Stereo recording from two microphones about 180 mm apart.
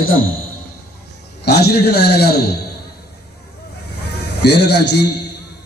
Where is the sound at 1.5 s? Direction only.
65° left (ahead or behind).